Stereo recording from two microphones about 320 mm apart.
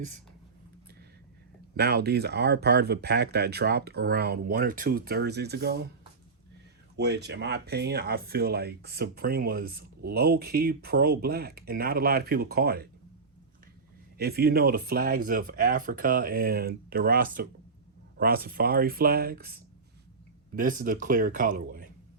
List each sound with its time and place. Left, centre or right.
1.7 s speech: right
6.9 s speech: right
14.2 s speech: right
20.6 s speech: right